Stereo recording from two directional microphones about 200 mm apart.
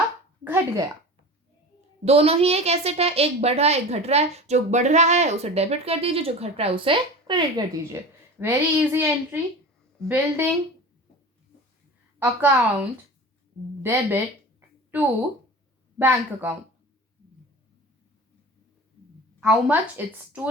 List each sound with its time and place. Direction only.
0.4 s a sound: 10° right (ahead or behind)
2.0 s a woman's voice: 30° right (ahead or behind)
8.4 s a woman's voice: 10° right (ahead or behind)
12.2 s a woman's voice: 10° right (ahead or behind)
13.8 s a woman's voice: 10° right (ahead or behind)
14.8 s a sound: 10° right (ahead or behind)
16.0 s a woman's voice: 10° right (ahead or behind)
19.4 s a woman's voice: 5° right (ahead or behind)